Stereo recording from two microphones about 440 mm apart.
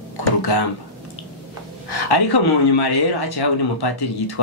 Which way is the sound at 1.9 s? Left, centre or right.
Left.